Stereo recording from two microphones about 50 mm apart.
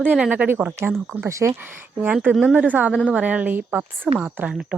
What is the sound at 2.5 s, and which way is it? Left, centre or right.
Speech, right.